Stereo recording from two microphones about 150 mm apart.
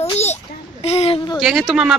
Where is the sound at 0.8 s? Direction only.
45° left (ahead or behind).